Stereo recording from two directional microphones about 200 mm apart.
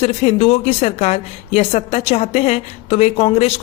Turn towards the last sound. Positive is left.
turn(degrees=30)  # may be behind; listen again after turning